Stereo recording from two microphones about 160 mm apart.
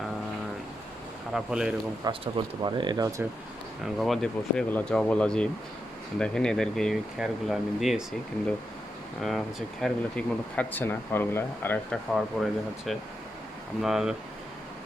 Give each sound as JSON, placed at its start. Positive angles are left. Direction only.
{"t": 1.3, "sound": "speech", "side_deg": -5}
{"t": 2.2, "sound": "speech", "side_deg": -30}
{"t": 3.9, "sound": "speech", "side_deg": 0}
{"t": 9.2, "sound": "speech", "side_deg": 0}
{"t": 12.1, "sound": "speech", "side_deg": 0}